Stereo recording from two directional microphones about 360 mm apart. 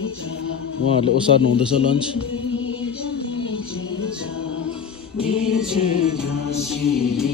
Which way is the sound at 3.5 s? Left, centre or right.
Left.